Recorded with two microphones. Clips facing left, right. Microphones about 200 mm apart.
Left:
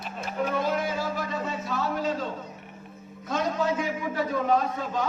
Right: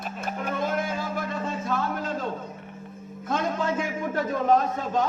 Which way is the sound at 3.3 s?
50° right (ahead or behind).